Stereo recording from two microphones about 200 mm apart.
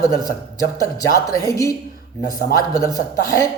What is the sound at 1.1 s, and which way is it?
Speech, 15° left (ahead or behind).